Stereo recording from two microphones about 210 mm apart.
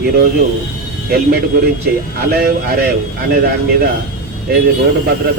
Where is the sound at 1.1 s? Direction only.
45° right (ahead or behind).